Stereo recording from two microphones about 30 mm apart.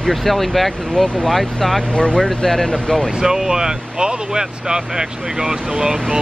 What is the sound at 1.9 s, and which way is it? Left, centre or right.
Speech, left.